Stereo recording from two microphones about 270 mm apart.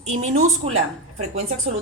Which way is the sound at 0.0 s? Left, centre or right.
Right.